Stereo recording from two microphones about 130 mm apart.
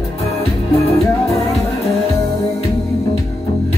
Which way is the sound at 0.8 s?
50° left (ahead or behind).